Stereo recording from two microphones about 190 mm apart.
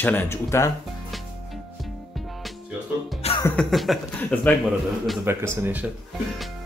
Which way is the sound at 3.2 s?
35° left (ahead or behind).